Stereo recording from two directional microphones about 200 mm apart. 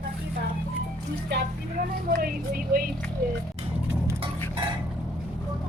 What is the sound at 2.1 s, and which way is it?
Speech, 45° right (ahead or behind).